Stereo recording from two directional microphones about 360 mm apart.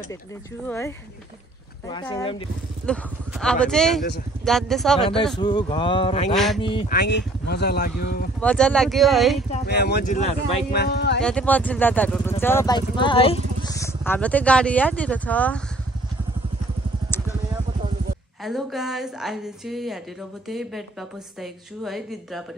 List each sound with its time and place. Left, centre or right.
0.7 s speech: centre
2.9 s a woman's voice: centre
5.4 s speech: centre
6.3 s a woman's voice: centre
6.9 s speech: left
8.4 s a woman's voice: centre
9.5 s speech: left
11.2 s a woman's voice: centre
18.4 s a woman's voice: centre